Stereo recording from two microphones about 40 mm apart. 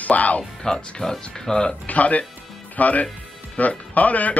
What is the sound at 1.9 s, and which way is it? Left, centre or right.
Speech, left.